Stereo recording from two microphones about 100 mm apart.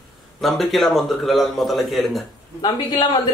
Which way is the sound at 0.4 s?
Centre (ahead or behind).